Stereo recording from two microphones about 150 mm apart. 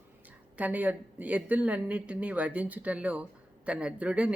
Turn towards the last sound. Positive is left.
turn(degrees=-10)  # may be behind; listen again after turning